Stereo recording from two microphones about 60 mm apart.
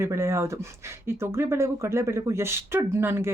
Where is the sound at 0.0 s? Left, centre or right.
Right.